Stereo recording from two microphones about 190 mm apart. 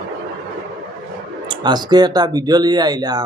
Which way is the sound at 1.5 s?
25° right (ahead or behind).